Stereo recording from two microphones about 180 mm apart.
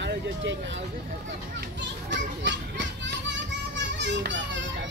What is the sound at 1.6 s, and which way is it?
Children playing, 75° right (ahead or behind).